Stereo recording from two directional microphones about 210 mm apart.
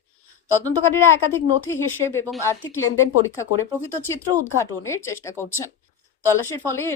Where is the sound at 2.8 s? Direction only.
75° left (ahead or behind).